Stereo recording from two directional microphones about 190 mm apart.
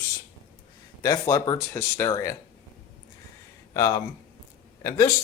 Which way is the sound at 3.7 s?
15° left (ahead or behind).